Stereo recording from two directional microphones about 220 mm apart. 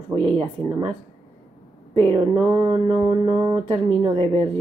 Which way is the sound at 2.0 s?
25° right (ahead or behind).